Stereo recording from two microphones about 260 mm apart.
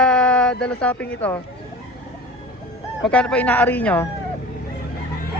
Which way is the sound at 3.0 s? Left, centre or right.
Centre.